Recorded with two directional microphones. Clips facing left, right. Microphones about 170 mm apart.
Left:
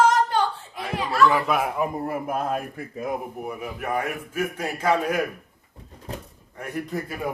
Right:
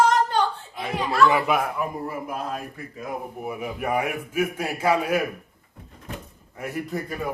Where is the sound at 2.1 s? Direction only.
55° left (ahead or behind).